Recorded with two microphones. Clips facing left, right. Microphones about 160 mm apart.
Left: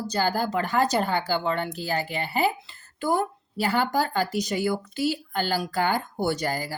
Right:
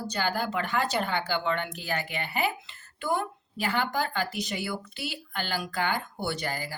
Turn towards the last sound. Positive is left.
turn(degrees=40)  # may be behind; listen again after turning